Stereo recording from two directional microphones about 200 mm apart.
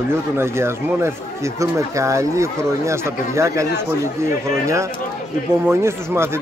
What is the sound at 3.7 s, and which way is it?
Speech, 55° left (ahead or behind).